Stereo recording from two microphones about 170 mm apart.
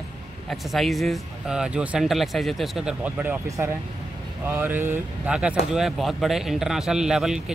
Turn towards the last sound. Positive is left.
turn(degrees=-5)  # may be behind; listen again after turning